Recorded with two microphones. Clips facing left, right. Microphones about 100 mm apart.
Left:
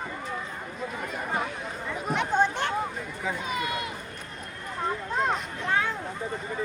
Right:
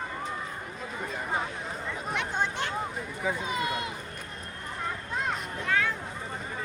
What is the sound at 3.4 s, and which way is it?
Speech, 25° right (ahead or behind).